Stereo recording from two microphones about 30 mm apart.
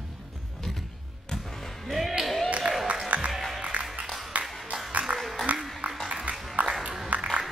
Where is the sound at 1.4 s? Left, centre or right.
Centre.